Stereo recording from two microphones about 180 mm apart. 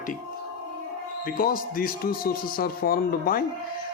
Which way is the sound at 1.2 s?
50° left (ahead or behind).